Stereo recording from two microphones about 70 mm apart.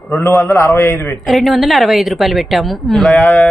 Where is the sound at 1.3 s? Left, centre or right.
Centre.